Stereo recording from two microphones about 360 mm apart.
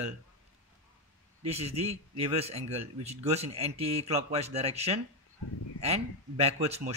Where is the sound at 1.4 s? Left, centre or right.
Centre.